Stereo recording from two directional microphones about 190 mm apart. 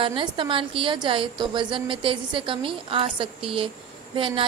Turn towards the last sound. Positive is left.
turn(degrees=-30)  # may be behind; listen again after turning